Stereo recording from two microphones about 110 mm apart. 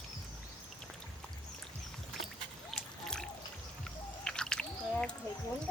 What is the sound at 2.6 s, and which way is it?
Music, 5° left (ahead or behind).